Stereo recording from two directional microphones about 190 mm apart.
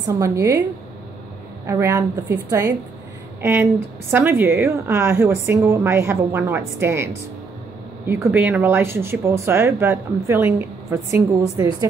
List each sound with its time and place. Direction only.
0.0 s speech: 15° right (ahead or behind)
1.7 s speech: 15° right (ahead or behind)
4.1 s speech: 10° right (ahead or behind)
8.1 s speech: 10° right (ahead or behind)